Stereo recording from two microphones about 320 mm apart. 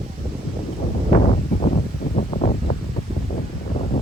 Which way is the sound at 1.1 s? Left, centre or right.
Left.